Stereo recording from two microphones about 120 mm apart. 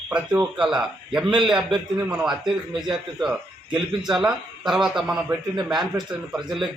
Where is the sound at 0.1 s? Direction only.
15° right (ahead or behind).